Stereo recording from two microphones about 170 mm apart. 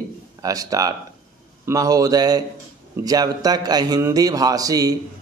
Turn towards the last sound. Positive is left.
turn(degrees=-20)  # may be behind; listen again after turning